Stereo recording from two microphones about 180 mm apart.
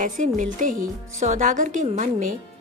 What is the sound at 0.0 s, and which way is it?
Speech, 45° right (ahead or behind).